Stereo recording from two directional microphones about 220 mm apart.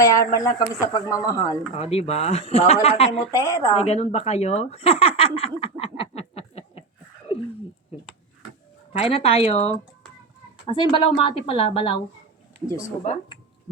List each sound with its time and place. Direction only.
0.0 s speech: 15° left (ahead or behind)
1.7 s a woman's voice: 25° left (ahead or behind)
3.3 s speech: 15° left (ahead or behind)
3.8 s speech: 30° left (ahead or behind)
8.9 s a woman's voice: 25° left (ahead or behind)